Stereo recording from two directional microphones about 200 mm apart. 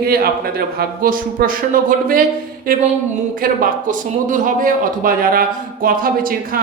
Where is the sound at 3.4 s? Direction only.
45° right (ahead or behind).